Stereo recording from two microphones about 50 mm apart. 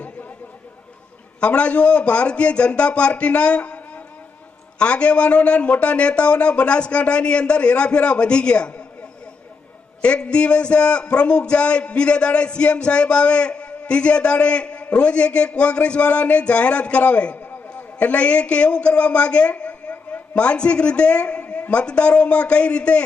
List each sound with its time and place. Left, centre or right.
1.4 s a man's voice: left
10.0 s a man's voice: left